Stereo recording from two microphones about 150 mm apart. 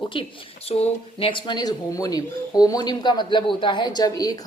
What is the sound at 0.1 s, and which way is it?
A woman's voice, 40° left (ahead or behind).